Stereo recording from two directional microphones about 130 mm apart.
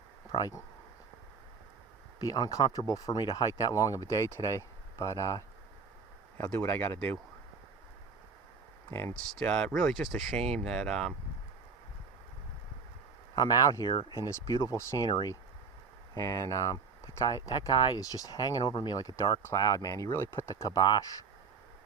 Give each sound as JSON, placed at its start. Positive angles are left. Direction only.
{"t": 0.3, "sound": "speech", "side_deg": 30}
{"t": 2.1, "sound": "speech", "side_deg": 30}
{"t": 8.9, "sound": "speech", "side_deg": 20}
{"t": 9.3, "sound": "speech", "side_deg": 5}
{"t": 13.3, "sound": "speech", "side_deg": 30}